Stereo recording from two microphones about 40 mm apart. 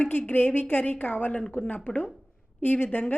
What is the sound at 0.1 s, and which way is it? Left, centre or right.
A woman's voice, left.